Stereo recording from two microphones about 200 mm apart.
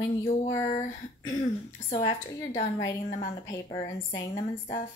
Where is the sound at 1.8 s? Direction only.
25° left (ahead or behind).